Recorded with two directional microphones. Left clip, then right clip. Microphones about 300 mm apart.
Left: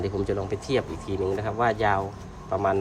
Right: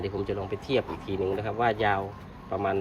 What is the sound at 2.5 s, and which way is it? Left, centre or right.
Speech, centre.